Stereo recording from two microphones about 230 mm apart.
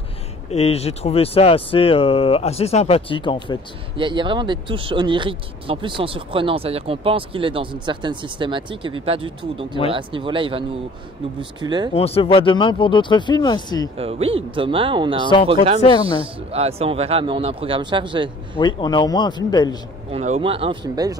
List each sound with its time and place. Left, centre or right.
0.5 s speech: left
3.9 s speech: right
11.6 s speech: centre
11.9 s speech: left
13.9 s speech: right
15.8 s speech: left
16.2 s speech: right
18.6 s speech: centre
20.1 s speech: right